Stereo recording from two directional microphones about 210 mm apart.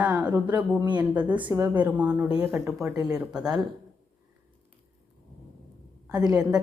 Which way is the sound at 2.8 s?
15° right (ahead or behind).